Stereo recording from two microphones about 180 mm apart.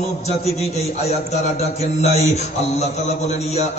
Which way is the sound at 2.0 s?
35° left (ahead or behind).